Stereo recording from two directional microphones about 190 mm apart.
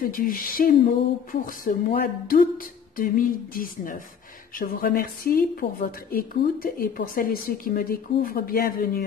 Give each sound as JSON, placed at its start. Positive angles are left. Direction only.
{"t": 0.0, "sound": "a woman's voice", "side_deg": 50}